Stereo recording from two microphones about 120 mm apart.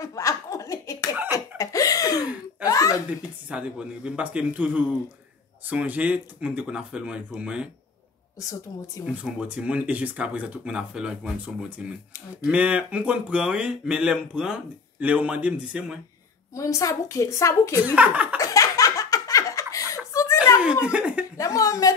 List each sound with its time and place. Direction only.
0.0 s slap: 30° left (ahead or behind)
1.1 s a sound: 15° right (ahead or behind)
1.6 s laughter: 30° left (ahead or behind)
3.4 s speech: 10° right (ahead or behind)
8.4 s a woman's voice: 30° left (ahead or behind)
9.0 s speech: 10° right (ahead or behind)
16.5 s a woman's voice: 25° left (ahead or behind)
17.9 s speech: 10° right (ahead or behind)
18.4 s laughter: 30° left (ahead or behind)
20.1 s a sound: 25° left (ahead or behind)
20.8 s speech: 10° right (ahead or behind)
21.4 s a woman's voice: 30° left (ahead or behind)